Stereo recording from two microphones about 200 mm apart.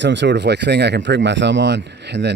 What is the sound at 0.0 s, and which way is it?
Speech, 60° right (ahead or behind).